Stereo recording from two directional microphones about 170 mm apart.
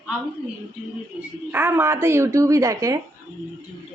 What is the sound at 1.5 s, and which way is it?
A woman's voice, 10° right (ahead or behind).